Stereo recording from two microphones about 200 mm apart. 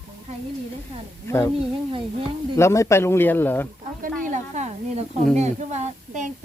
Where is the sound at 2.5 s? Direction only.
15° left (ahead or behind).